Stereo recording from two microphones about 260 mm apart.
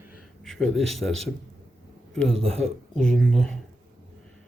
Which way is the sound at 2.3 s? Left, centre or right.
Right.